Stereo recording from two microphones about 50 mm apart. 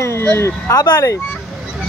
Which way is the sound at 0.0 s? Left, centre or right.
Left.